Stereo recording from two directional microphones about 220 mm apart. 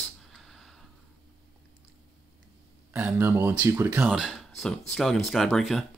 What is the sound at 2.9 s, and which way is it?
Speech, 10° right (ahead or behind).